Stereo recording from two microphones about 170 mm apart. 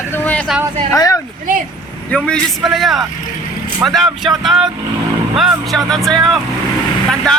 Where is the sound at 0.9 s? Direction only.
20° left (ahead or behind).